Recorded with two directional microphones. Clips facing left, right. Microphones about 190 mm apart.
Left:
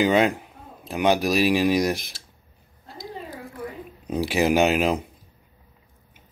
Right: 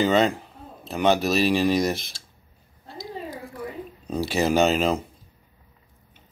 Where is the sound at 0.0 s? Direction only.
10° left (ahead or behind).